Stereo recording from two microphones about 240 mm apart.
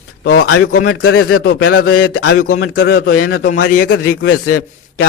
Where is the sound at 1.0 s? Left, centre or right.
Left.